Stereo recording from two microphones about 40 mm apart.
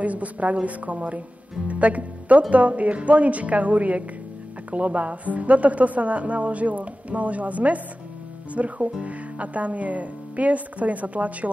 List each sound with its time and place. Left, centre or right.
0.0 s speech: right